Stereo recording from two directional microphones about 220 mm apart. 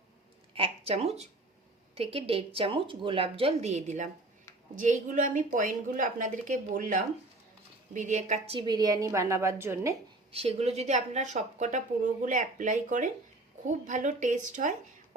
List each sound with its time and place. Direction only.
0.5 s a woman's voice: 25° right (ahead or behind); by 9.9 s 10° right (ahead or behind)
10.3 s speech: 25° right (ahead or behind)